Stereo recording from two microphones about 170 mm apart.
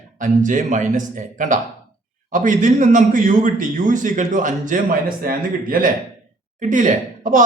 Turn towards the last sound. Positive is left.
turn(degrees=-50)  # may be behind; listen again after turning